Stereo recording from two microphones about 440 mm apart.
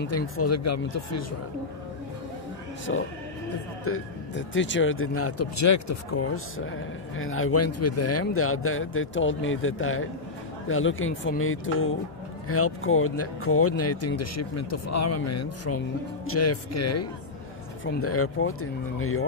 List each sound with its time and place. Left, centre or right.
0.0 s speech: left
2.9 s speech: left